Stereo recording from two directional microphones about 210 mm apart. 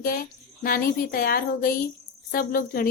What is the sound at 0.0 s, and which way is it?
Speech, 45° left (ahead or behind).